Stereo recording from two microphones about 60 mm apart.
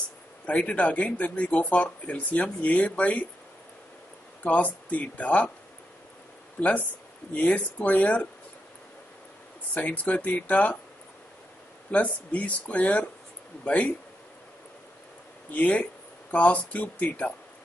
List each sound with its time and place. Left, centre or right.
0.5 s speech: left
4.4 s speech: left
6.6 s speech: left
9.8 s speech: left
11.9 s speech: left
15.5 s speech: left